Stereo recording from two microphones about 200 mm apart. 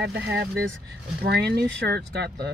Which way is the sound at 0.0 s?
60° right (ahead or behind).